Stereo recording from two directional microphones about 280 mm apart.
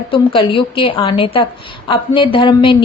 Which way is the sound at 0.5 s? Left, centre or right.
Centre.